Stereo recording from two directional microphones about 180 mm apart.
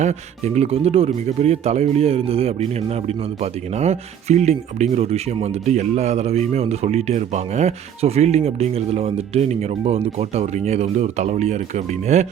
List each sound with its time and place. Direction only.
0.0 s speech: 40° right (ahead or behind)